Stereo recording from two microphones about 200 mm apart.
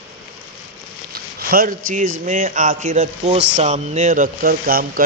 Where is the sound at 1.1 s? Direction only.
45° right (ahead or behind).